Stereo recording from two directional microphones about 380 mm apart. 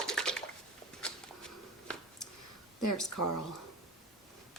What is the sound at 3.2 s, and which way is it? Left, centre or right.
Speech, left.